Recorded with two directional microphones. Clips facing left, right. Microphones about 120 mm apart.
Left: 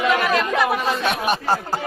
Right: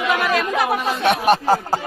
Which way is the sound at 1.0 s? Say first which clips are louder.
Right 10 dB; 90° right.